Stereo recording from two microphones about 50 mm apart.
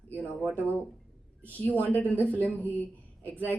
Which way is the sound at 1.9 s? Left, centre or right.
Left.